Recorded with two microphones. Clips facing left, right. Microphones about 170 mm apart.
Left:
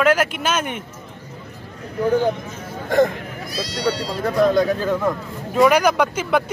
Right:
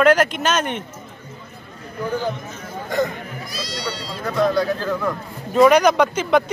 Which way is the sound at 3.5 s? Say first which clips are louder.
Left 7 dB; 60° left (ahead or behind).